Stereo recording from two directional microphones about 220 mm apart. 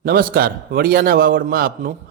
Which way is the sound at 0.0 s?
40° right (ahead or behind).